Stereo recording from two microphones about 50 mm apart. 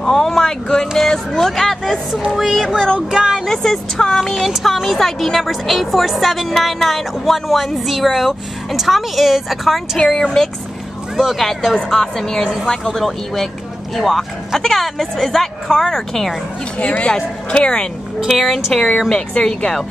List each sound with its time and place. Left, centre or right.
0.0 s a sound: centre
3.1 s speech: centre
3.3 s a woman's voice: centre
9.9 s a woman's voice: centre
17.0 s speech: left
18.3 s a woman's voice: centre